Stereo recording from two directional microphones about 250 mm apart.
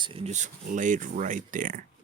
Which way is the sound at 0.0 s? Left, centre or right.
Right.